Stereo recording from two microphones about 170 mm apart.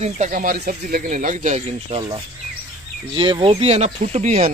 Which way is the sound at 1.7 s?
30° right (ahead or behind).